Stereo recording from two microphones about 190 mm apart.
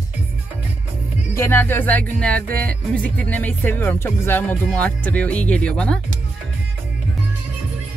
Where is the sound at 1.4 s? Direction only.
10° left (ahead or behind).